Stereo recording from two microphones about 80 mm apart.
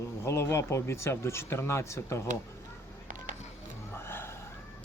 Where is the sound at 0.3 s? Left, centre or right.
Left.